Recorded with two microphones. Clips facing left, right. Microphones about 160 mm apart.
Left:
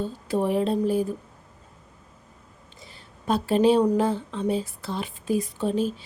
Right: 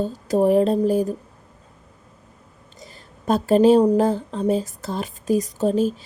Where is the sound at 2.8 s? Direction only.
45° right (ahead or behind).